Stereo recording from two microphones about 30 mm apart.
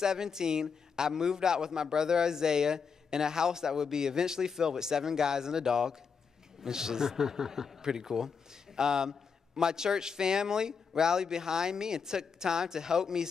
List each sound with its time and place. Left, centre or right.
0.0 s speech: centre